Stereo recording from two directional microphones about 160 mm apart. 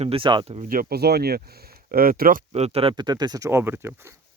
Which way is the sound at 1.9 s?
65° right (ahead or behind).